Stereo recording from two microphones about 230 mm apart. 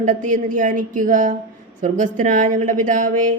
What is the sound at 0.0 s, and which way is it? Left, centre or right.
A man's voice, right.